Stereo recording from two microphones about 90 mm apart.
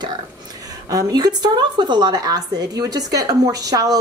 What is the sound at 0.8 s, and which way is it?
A woman's voice, 40° right (ahead or behind).